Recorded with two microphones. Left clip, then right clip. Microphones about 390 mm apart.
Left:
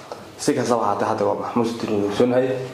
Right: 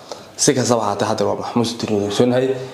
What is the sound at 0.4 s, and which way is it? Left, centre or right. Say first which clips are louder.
A man's voice: right 4 dB; right.